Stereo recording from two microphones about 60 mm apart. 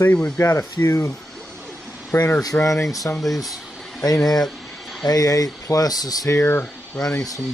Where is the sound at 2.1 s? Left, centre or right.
Left.